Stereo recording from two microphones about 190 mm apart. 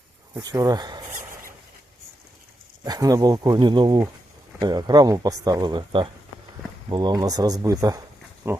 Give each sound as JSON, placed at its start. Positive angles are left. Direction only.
{"t": 0.3, "sound": "speech", "side_deg": -20}
{"t": 2.8, "sound": "speech", "side_deg": -20}